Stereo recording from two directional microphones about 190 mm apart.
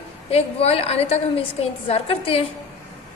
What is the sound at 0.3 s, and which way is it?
A woman's voice, 30° left (ahead or behind).